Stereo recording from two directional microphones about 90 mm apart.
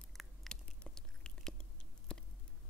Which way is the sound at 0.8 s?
10° left (ahead or behind).